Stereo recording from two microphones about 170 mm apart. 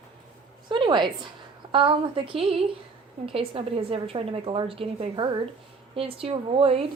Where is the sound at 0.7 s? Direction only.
25° right (ahead or behind).